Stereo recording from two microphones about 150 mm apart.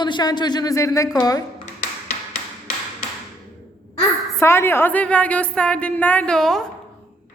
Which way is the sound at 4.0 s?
15° left (ahead or behind).